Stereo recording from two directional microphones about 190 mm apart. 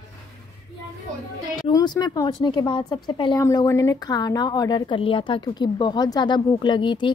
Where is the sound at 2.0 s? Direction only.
20° left (ahead or behind).